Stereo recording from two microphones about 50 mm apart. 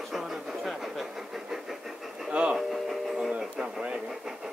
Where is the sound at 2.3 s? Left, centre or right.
Centre.